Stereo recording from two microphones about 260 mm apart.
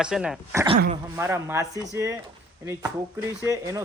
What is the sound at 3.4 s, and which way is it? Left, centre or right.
Speech, centre.